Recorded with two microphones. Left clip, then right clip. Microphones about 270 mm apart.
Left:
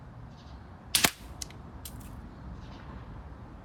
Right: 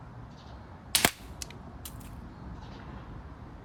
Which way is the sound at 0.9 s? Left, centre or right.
Right.